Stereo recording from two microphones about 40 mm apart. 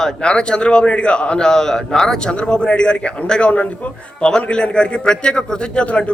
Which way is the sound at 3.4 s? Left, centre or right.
Left.